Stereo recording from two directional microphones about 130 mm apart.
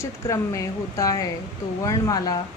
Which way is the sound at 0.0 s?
25° left (ahead or behind).